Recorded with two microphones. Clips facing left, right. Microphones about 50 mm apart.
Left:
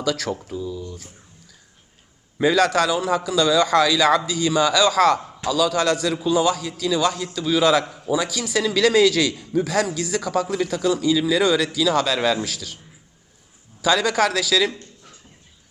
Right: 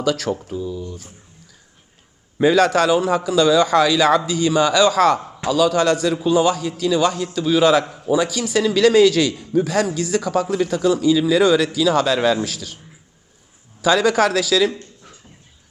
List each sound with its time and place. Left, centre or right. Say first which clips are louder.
0.0 s a man's voice: right 3 dB; centre
0.4 s a sound: right 3 dB; right
2.4 s a man's voice: right 3 dB; centre
13.8 s a man's voice: right 3 dB; centre